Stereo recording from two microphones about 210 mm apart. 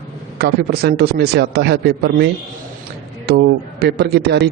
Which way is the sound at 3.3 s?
50° right (ahead or behind).